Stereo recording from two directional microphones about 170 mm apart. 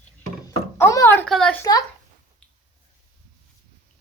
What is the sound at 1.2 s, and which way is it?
Speech, 5° left (ahead or behind).